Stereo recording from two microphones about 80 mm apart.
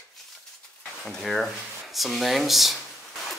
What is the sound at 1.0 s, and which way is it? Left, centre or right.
Speech, centre.